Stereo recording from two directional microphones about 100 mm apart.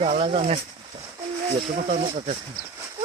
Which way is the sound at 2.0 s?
90° right.